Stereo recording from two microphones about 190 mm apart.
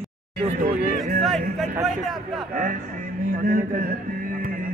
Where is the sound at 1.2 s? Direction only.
Centre (ahead or behind).